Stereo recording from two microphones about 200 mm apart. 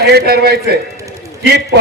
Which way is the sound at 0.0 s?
55° right (ahead or behind).